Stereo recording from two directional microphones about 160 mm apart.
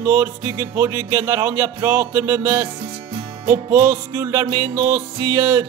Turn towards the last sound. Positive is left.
turn(degrees=-15)  # may be behind; listen again after turning